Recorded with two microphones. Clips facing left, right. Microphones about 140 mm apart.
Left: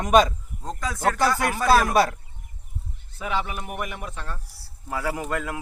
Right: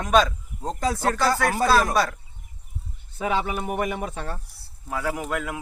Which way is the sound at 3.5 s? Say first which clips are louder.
Right 6 dB; 40° right (ahead or behind).